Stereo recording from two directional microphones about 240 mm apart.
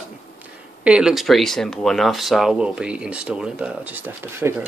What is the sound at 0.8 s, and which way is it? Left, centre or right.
Speech, centre.